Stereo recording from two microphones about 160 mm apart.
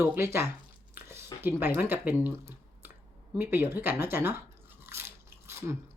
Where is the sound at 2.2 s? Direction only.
15° right (ahead or behind).